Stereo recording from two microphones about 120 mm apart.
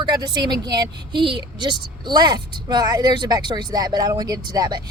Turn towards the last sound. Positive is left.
turn(degrees=-35)  # may be behind; listen again after turning